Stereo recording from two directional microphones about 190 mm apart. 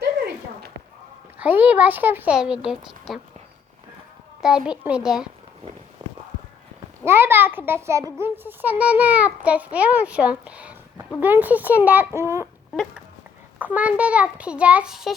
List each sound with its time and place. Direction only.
1.4 s a child's voice: 10° right (ahead or behind)
4.4 s a child's voice: 5° right (ahead or behind)
6.0 s walk: 20° right (ahead or behind)
7.0 s a child's voice: 10° right (ahead or behind)
13.6 s a child's voice: 10° right (ahead or behind)